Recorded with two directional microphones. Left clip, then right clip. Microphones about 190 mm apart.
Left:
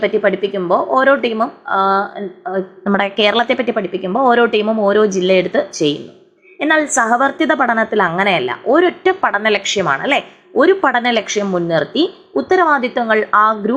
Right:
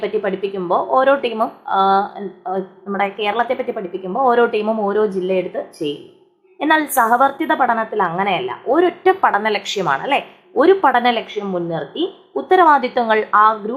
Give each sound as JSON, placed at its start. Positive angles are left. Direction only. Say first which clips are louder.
{"t": 0.0, "sound": "a woman's voice", "louder": "left 5 dB", "side_deg": 10}
{"t": 2.8, "sound": "a woman's voice", "louder": "left 6 dB", "side_deg": 25}
{"t": 6.6, "sound": "a woman's voice", "louder": "left 1 dB", "side_deg": 0}
{"t": 12.6, "sound": "a woman's voice", "louder": "right 1 dB", "side_deg": 0}
{"t": 13.3, "sound": "speech", "louder": "even", "side_deg": 20}